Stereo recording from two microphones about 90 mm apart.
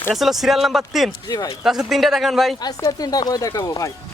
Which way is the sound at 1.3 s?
45° left (ahead or behind).